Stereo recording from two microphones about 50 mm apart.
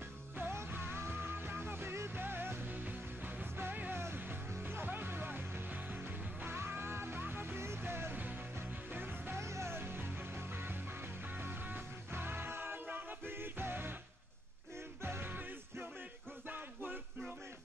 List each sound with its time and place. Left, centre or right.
0.4 s music: right
2.7 s music: right
6.4 s music: right
9.4 s music: right
15.0 s music: right